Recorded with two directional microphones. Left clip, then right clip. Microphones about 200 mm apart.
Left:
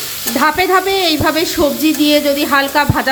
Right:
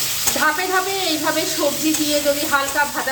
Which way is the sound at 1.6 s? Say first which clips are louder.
Left 9 dB; 40° left (ahead or behind).